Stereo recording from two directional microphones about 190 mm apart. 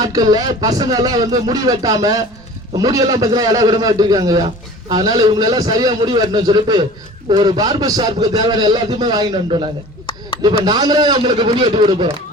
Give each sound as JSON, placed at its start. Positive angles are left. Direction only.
{"t": 0.0, "sound": "a man's voice", "side_deg": -20}
{"t": 10.1, "sound": "chop", "side_deg": 25}
{"t": 10.6, "sound": "a man's voice", "side_deg": -20}